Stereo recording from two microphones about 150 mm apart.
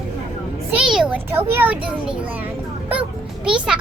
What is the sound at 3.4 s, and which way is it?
Children playing, 5° right (ahead or behind).